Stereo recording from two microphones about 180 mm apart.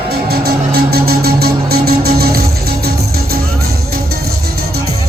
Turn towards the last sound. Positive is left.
turn(degrees=-60)  # may be behind; listen again after turning